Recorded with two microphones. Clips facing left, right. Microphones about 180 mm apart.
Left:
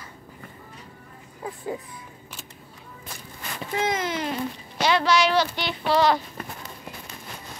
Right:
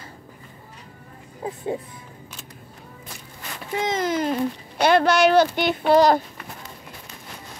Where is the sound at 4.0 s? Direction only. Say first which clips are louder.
Right 5 dB; 45° right (ahead or behind).